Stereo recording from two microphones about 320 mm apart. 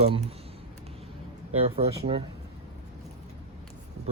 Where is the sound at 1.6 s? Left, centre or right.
Centre.